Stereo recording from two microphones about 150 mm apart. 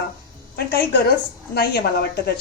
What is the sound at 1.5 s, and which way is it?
Speech, 90° left.